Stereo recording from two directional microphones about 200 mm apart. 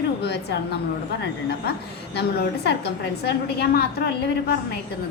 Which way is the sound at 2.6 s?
55° left (ahead or behind).